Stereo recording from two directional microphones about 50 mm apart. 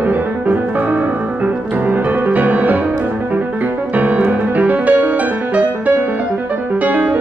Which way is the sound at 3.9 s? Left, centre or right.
Right.